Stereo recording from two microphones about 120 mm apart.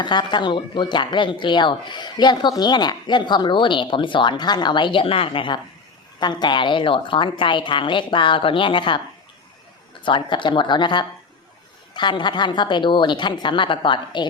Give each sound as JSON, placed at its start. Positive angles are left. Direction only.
{"t": 0.0, "sound": "a woman's voice", "side_deg": 40}
{"t": 10.0, "sound": "speech", "side_deg": 45}